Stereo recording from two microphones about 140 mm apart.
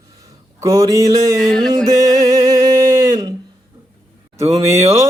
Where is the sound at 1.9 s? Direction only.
25° right (ahead or behind).